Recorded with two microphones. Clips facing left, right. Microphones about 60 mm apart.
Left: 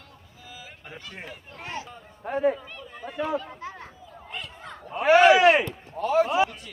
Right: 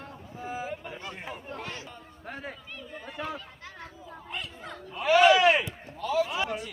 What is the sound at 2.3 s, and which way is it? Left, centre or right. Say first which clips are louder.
Speech: left 15 dB; centre.